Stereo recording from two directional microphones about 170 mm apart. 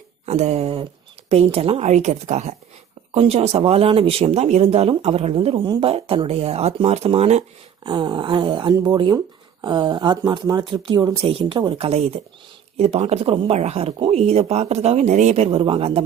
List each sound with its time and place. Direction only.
0.3 s speech: 40° right (ahead or behind)
7.9 s speech: 25° right (ahead or behind)